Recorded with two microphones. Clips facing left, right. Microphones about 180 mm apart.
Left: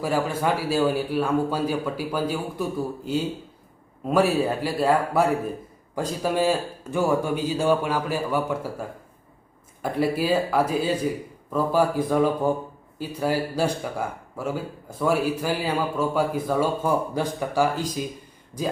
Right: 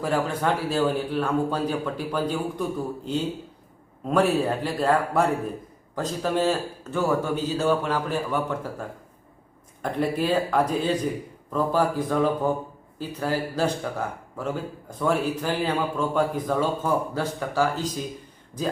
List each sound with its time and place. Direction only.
0.0 s speech: 5° left (ahead or behind)